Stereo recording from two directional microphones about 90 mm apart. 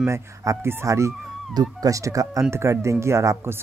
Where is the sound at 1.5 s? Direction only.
45° right (ahead or behind).